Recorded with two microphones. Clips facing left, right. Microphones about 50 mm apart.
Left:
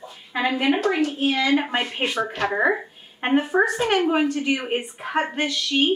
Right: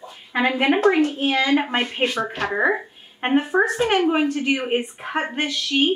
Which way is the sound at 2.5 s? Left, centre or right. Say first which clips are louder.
Right 1 dB; centre.